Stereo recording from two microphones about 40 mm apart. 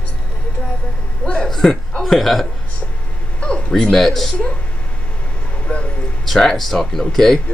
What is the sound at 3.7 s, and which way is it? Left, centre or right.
Speech, centre.